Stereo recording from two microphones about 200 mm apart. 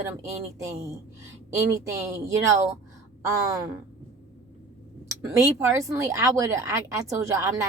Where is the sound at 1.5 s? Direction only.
15° right (ahead or behind).